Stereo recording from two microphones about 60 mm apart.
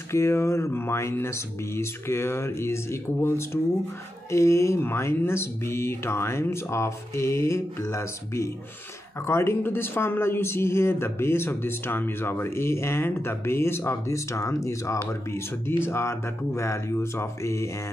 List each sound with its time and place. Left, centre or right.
0.1 s a man's voice: left
4.3 s speech: left
4.7 s a man's voice: left